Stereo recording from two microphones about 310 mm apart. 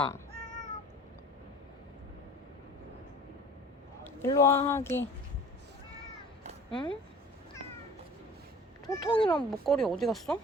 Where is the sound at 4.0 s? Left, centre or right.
Centre.